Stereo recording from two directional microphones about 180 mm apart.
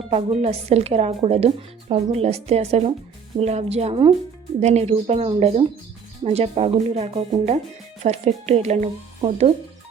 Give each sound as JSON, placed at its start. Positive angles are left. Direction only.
{"t": 0.1, "sound": "speech", "side_deg": -35}